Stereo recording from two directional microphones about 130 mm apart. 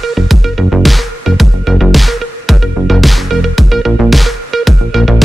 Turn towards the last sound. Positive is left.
turn(degrees=0)  # may be behind; listen again after turning